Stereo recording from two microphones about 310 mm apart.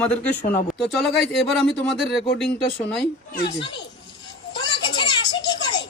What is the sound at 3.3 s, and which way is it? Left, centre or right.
Speech, left.